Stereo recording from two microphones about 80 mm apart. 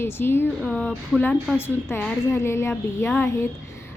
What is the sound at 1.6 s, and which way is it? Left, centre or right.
A woman's voice, left.